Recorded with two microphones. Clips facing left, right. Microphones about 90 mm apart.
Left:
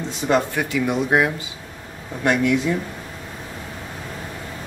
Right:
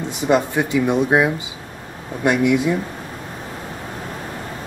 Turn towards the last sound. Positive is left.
turn(degrees=-10)  # may be behind; listen again after turning